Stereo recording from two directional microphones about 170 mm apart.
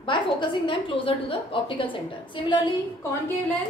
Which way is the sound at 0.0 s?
30° left (ahead or behind).